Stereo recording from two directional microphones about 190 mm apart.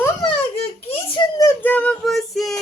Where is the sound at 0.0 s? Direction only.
20° left (ahead or behind).